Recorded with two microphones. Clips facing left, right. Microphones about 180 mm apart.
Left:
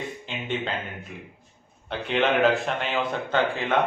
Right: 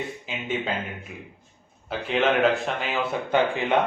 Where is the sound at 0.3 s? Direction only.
5° right (ahead or behind).